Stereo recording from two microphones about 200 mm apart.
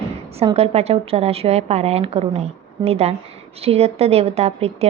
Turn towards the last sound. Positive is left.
turn(degrees=-30)  # may be behind; listen again after turning